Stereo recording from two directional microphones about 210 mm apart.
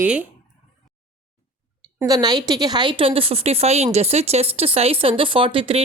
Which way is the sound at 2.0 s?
20° right (ahead or behind).